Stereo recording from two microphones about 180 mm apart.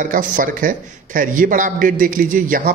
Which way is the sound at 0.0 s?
50° right (ahead or behind).